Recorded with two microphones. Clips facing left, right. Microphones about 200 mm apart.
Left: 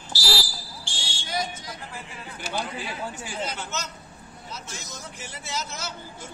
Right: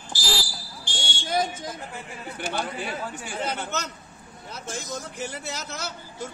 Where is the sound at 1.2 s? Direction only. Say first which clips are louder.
Right 5 dB; 50° right (ahead or behind).